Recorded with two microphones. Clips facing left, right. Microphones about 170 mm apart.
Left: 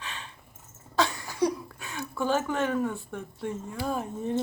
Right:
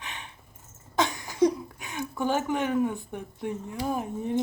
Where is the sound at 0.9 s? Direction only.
20° right (ahead or behind).